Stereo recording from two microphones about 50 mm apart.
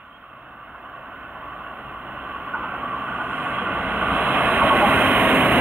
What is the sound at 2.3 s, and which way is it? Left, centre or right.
Vehicle, right.